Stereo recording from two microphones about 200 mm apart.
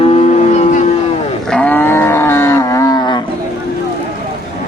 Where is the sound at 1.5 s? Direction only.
5° left (ahead or behind).